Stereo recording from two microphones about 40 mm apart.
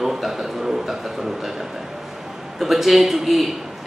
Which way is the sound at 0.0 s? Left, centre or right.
Centre.